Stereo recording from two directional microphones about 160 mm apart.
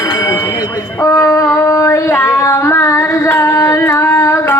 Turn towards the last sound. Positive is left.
turn(degrees=20)  # may be behind; listen again after turning